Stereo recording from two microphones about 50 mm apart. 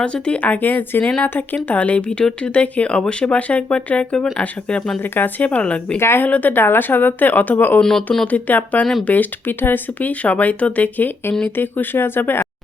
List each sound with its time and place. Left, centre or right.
0.0 s speech: left
1.7 s speech: left
6.0 s speech: left
6.2 s speech: left
7.8 s speech: centre
8.3 s speech: left